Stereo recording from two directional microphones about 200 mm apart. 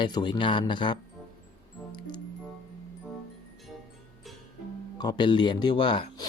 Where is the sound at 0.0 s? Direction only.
20° left (ahead or behind).